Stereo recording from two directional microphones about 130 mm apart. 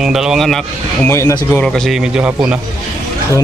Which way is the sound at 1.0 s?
20° left (ahead or behind).